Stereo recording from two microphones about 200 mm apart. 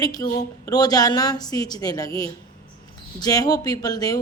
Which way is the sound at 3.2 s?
20° left (ahead or behind).